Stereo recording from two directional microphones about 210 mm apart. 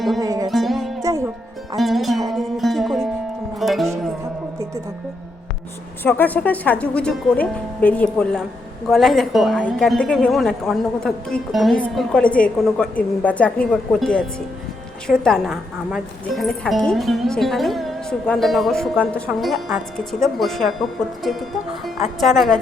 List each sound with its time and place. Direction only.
0.2 s music: 15° right (ahead or behind)
0.5 s music: centre (ahead or behind)
6.0 s a woman's voice: 10° left (ahead or behind)